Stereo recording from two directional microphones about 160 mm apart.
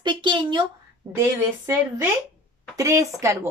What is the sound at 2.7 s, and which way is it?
Speech, 20° right (ahead or behind).